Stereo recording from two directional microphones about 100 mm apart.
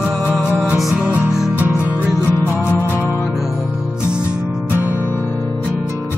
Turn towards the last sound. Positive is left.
turn(degrees=-20)  # may be behind; listen again after turning